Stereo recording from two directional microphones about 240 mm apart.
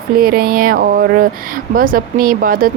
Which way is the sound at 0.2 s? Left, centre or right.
Right.